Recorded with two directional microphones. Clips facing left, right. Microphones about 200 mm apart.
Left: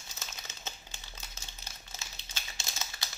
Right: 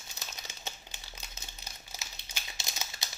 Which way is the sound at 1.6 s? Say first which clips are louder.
Right 1 dB; 15° right (ahead or behind).